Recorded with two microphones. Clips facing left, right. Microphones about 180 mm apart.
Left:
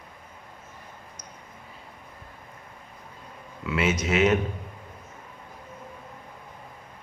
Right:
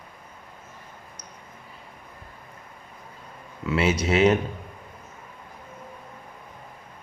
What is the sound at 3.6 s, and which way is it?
Speech, 30° right (ahead or behind).